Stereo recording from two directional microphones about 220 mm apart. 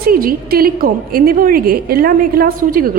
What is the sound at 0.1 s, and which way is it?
A woman's voice, 40° right (ahead or behind).